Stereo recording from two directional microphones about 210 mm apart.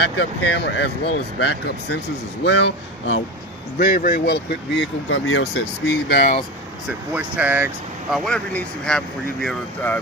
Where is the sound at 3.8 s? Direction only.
45° left (ahead or behind); by 5.6 s 70° left (ahead or behind).